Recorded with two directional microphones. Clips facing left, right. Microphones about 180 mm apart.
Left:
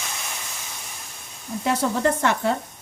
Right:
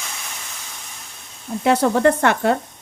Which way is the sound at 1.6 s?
65° right (ahead or behind).